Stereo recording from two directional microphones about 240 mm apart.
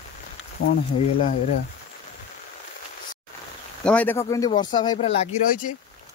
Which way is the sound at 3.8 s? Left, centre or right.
Centre.